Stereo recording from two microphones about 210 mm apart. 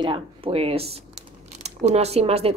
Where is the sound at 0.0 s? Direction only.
25° right (ahead or behind).